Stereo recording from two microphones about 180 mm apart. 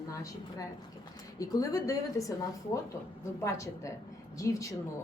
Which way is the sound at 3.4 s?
15° left (ahead or behind).